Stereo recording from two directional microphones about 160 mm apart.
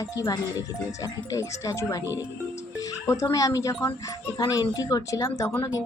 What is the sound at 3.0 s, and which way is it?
A woman's voice, 20° left (ahead or behind).